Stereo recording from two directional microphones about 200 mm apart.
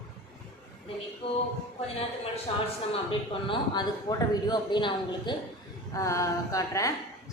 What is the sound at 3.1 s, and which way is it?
A man's voice, 20° left (ahead or behind).